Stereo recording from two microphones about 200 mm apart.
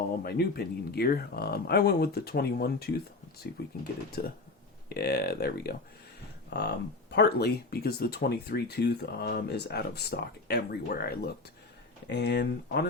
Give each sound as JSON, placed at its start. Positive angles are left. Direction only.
{"t": 0.3, "sound": "speech", "side_deg": 50}